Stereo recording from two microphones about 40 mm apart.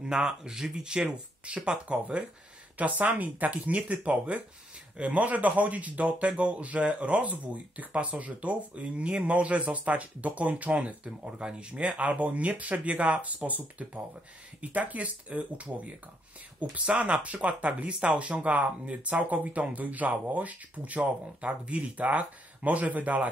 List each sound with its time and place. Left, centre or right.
0.0 s speech: centre; by 11.0 s right
11.2 s speech: right
11.9 s speech: right